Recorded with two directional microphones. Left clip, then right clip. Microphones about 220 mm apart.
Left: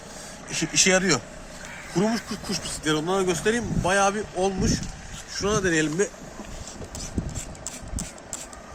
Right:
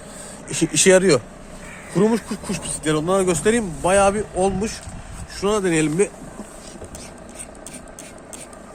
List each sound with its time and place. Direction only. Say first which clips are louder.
0.5 s speech: right 6 dB; 55° right (ahead or behind)